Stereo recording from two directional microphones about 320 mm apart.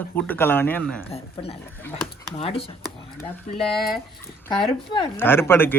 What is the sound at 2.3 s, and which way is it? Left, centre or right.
Speech, centre.